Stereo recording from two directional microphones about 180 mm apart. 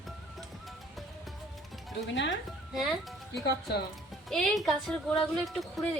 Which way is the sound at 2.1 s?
90° left.